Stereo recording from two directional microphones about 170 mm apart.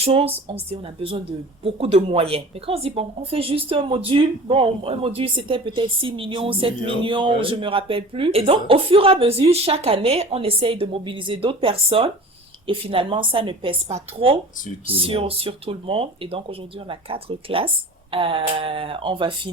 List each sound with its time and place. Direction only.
0.0 s speech: 35° right (ahead or behind)